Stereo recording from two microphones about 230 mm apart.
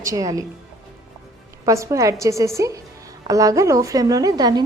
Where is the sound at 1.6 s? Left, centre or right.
Centre.